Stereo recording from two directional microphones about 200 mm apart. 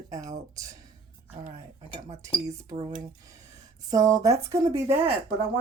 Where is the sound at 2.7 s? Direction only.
25° right (ahead or behind).